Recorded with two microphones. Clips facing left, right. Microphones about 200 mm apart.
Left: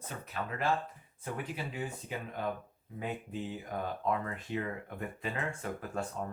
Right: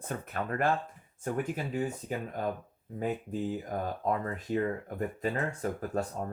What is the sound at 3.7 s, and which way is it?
Speech, 40° right (ahead or behind).